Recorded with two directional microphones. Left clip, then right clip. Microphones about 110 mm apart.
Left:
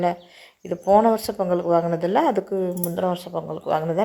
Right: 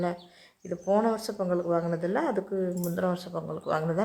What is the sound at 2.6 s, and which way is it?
Speech, 15° left (ahead or behind).